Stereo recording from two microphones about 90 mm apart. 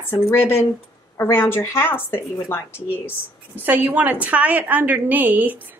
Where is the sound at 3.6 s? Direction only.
20° right (ahead or behind).